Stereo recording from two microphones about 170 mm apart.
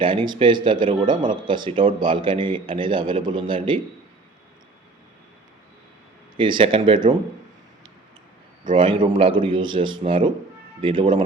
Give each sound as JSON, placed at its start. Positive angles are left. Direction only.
{"t": 0.0, "sound": "speech", "side_deg": -30}
{"t": 6.3, "sound": "speech", "side_deg": -30}
{"t": 8.7, "sound": "speech", "side_deg": -30}